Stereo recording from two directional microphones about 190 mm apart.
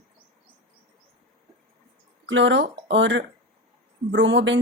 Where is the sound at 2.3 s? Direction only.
75° right (ahead or behind).